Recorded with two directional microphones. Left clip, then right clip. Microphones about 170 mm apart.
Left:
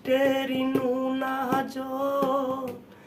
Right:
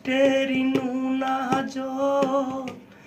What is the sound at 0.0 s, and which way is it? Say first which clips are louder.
Mantra: right 3 dB; 25° left (ahead or behind).